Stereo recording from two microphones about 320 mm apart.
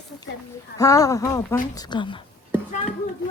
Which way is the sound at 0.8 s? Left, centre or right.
Centre.